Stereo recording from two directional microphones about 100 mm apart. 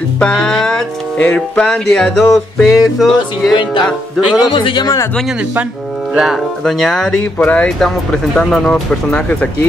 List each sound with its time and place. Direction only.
0.2 s music: 10° left (ahead or behind)
4.4 s a man's voice: 50° left (ahead or behind)
6.1 s speech: centre (ahead or behind)
7.3 s music: 15° left (ahead or behind)